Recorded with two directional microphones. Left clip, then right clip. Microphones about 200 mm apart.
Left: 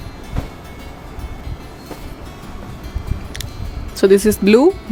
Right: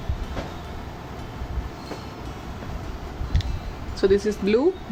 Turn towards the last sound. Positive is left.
turn(degrees=55)  # may be behind; listen again after turning